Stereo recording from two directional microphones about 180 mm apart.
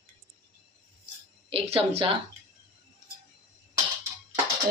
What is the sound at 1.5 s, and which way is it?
Speech, 35° right (ahead or behind).